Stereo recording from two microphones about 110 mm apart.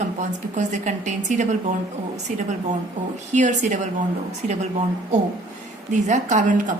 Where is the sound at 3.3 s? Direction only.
90° right.